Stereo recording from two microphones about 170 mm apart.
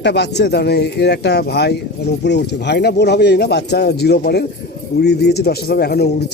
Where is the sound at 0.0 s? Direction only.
90° left.